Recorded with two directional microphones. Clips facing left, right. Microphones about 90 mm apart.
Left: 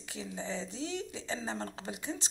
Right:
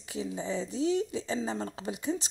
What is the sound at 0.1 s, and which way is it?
Speech, 20° right (ahead or behind).